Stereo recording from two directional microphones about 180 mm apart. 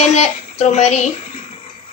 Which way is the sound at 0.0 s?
40° left (ahead or behind).